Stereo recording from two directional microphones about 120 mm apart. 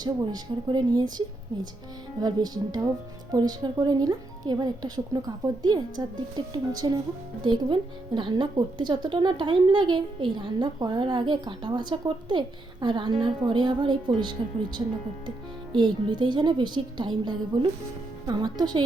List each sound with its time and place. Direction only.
0.0 s speech: 35° right (ahead or behind)
2.2 s speech: 35° right (ahead or behind)